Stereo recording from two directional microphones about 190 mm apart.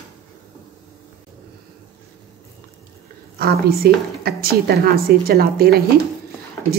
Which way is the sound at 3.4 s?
55° right (ahead or behind).